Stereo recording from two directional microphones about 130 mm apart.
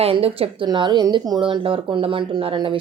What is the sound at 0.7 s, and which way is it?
A woman's voice, 35° right (ahead or behind).